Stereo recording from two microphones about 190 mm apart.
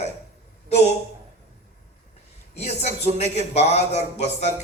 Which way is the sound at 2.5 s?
35° left (ahead or behind).